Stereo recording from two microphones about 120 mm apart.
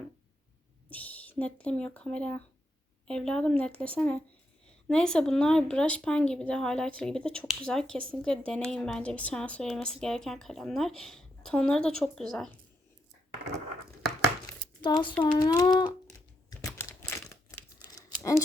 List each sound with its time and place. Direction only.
0.9 s a woman's voice: 15° left (ahead or behind)
14.8 s speech: 40° left (ahead or behind)
17.0 s crumpling: 25° left (ahead or behind)
17.8 s tearing: 30° left (ahead or behind)